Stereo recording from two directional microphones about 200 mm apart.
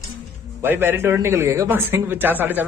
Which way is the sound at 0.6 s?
10° right (ahead or behind).